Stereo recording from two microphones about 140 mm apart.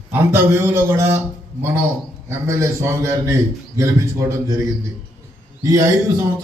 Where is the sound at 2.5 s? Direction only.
20° right (ahead or behind).